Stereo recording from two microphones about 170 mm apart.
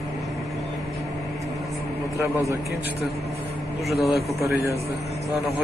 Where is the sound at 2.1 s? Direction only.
20° right (ahead or behind).